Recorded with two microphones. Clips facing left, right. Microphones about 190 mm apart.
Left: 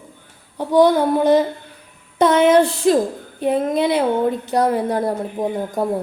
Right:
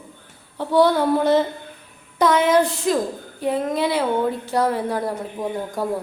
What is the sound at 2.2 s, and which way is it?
A woman's voice, 25° left (ahead or behind).